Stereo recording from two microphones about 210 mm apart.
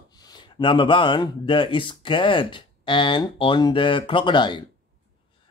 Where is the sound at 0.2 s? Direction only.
20° left (ahead or behind).